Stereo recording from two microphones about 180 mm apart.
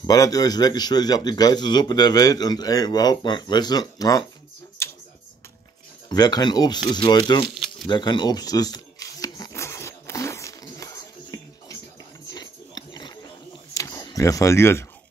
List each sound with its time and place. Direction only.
0.0 s a man's voice: 20° left (ahead or behind)
4.8 s tick-tock: 15° left (ahead or behind)
6.0 s a man's voice: 20° left (ahead or behind)
7.8 s camera: 25° left (ahead or behind)
12.4 s pig: 25° left (ahead or behind)
13.7 s speech: 15° left (ahead or behind)